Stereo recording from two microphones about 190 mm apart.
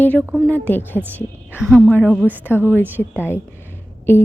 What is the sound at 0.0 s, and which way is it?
A woman's voice, 10° left (ahead or behind).